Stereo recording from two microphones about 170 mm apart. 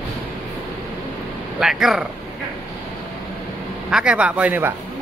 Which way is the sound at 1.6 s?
Centre (ahead or behind).